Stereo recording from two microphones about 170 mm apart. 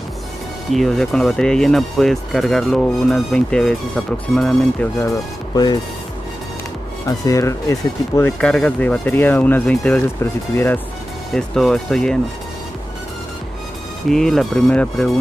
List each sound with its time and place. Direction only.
0.7 s speech: centre (ahead or behind)
5.0 s speech: 25° left (ahead or behind)
7.1 s speech: 20° left (ahead or behind)
8.4 s speech: 5° left (ahead or behind)
11.3 s speech: centre (ahead or behind)
14.0 s speech: centre (ahead or behind)